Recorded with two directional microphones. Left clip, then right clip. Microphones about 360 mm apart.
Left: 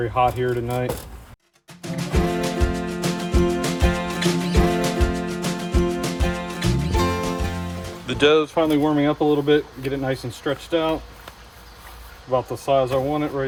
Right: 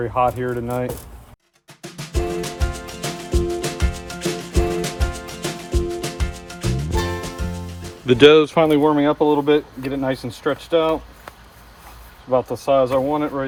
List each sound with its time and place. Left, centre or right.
0.0 s speech: centre
1.8 s music: centre
8.0 s speech: centre
12.8 s speech: right